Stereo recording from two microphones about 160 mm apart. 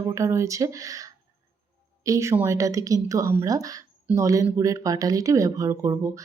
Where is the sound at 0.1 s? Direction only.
20° right (ahead or behind).